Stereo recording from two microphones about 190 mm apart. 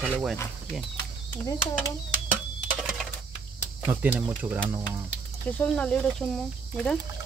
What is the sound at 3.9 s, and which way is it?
Speech, 10° right (ahead or behind).